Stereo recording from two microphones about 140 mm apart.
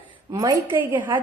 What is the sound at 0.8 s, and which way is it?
Speech, 15° right (ahead or behind).